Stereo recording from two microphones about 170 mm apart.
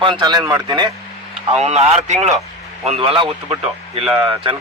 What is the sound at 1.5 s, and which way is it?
A man's voice, 40° right (ahead or behind).